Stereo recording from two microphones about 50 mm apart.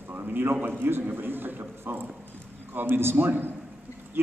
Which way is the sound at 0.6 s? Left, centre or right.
Right.